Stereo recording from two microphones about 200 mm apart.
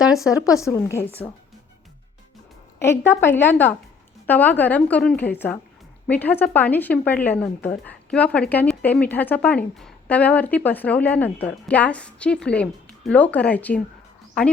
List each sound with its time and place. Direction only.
0.0 s speech: centre (ahead or behind)
0.6 s a woman's voice: 15° left (ahead or behind)
2.7 s a woman's voice: 15° left (ahead or behind)
4.3 s a woman's voice: 10° left (ahead or behind)